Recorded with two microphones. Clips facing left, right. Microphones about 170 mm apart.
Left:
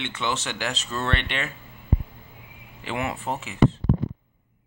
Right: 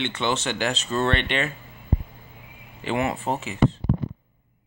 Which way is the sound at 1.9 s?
35° right (ahead or behind).